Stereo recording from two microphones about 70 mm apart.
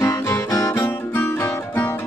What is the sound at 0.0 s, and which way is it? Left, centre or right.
Music, left.